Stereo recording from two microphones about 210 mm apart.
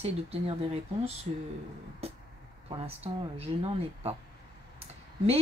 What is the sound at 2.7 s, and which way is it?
Speech, 30° right (ahead or behind).